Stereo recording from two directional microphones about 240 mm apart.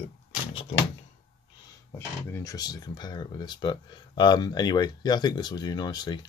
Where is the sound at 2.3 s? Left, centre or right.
Centre.